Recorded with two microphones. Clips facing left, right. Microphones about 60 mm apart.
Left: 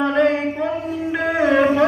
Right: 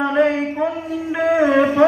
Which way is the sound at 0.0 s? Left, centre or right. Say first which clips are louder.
Even; centre.